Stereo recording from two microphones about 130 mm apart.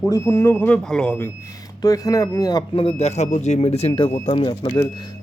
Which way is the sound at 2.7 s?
45° left (ahead or behind).